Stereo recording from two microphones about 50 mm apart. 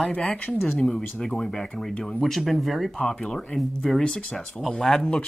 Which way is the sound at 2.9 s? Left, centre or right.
Centre.